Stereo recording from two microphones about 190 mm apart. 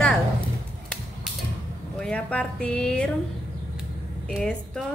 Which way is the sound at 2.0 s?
5° left (ahead or behind).